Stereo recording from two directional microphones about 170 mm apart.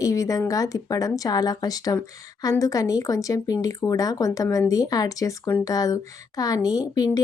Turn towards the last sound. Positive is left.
turn(degrees=20)  # may be behind; listen again after turning